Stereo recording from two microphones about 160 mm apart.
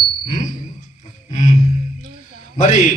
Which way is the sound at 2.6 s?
50° left (ahead or behind).